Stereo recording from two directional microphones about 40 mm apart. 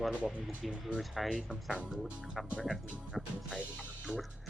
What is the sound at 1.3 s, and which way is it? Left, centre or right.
Speech, right.